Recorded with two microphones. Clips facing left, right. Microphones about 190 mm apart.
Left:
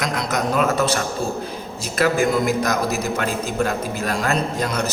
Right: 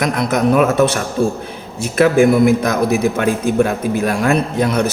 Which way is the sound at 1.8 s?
55° right (ahead or behind).